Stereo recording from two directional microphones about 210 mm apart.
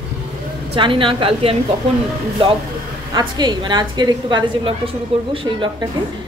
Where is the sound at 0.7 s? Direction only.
25° right (ahead or behind).